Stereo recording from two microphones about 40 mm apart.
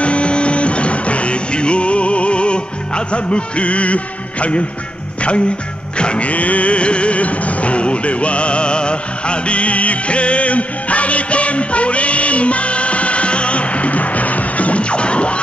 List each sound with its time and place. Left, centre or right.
0.0 s music: left
5.9 s music: left